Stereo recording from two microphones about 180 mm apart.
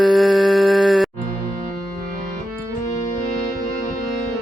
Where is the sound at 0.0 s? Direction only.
Centre (ahead or behind).